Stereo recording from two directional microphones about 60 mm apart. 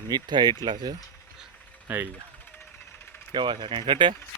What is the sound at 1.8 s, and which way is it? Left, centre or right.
Speech, right.